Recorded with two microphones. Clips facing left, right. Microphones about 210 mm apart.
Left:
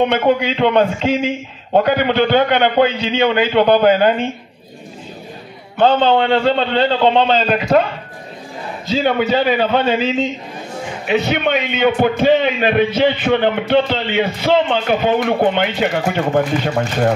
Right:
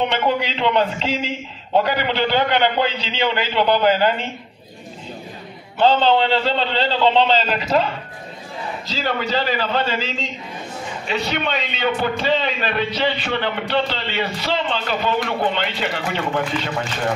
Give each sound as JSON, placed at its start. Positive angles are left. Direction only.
{"t": 0.0, "sound": "a man's voice", "side_deg": 50}
{"t": 5.8, "sound": "a man's voice", "side_deg": 55}
{"t": 8.8, "sound": "a man's voice", "side_deg": 55}